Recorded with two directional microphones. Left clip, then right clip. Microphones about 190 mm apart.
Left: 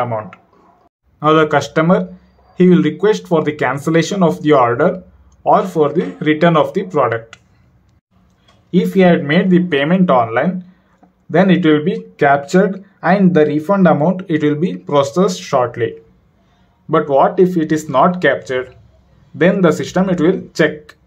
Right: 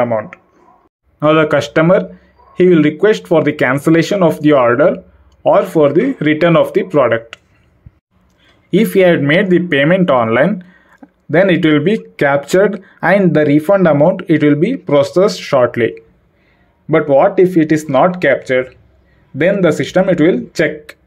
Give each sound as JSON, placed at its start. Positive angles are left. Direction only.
{"t": 0.0, "sound": "speech", "side_deg": -15}
{"t": 8.6, "sound": "speech", "side_deg": -30}
{"t": 16.9, "sound": "speech", "side_deg": -15}